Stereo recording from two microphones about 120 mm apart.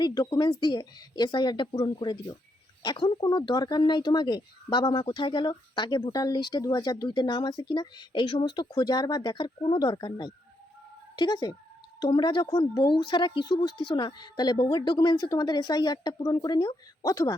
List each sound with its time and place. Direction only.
0.0 s speech: 35° left (ahead or behind)